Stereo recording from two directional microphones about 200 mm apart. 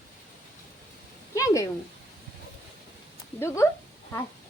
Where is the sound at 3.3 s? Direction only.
15° left (ahead or behind).